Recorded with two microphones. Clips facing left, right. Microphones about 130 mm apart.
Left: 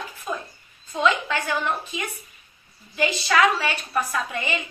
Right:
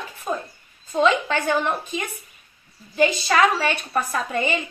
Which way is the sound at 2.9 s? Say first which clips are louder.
Right 3 dB; 35° right (ahead or behind).